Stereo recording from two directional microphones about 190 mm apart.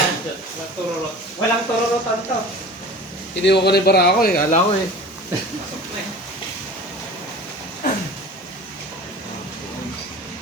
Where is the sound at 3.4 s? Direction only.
60° left (ahead or behind); by 4.6 s 45° left (ahead or behind).